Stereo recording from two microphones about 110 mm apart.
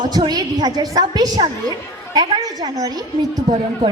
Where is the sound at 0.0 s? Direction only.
40° right (ahead or behind).